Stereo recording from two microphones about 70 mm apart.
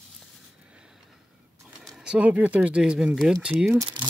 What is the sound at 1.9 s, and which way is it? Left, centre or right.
Speech, centre.